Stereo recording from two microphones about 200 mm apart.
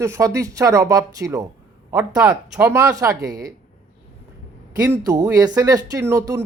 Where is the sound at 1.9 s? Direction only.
5° right (ahead or behind).